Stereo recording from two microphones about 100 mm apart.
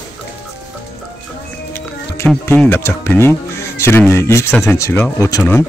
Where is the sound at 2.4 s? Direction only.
20° left (ahead or behind); by 5.4 s 35° left (ahead or behind).